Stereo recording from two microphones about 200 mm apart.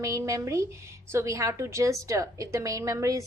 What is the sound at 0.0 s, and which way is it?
A woman's voice, 15° right (ahead or behind).